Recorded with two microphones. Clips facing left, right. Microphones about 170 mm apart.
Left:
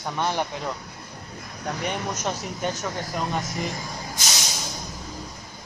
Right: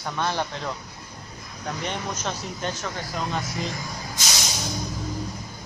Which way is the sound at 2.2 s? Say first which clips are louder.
Left 2 dB; 10° left (ahead or behind).